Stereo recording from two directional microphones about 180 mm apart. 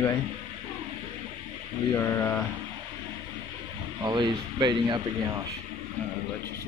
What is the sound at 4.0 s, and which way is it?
Speech, 20° right (ahead or behind).